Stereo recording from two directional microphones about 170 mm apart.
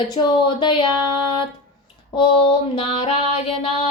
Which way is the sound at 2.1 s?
30° left (ahead or behind).